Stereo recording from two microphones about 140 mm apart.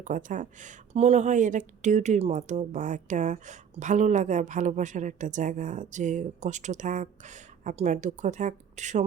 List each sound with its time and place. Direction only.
0.0 s a woman's voice: 65° right (ahead or behind)